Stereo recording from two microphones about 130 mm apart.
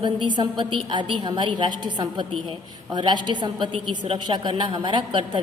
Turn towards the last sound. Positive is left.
turn(degrees=-40)  # may be behind; listen again after turning